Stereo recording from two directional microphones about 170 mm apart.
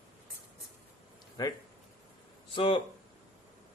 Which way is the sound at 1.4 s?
20° left (ahead or behind).